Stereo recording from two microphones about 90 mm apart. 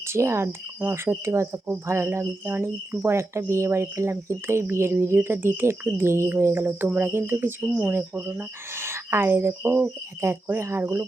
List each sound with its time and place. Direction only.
0.1 s speech: 30° right (ahead or behind)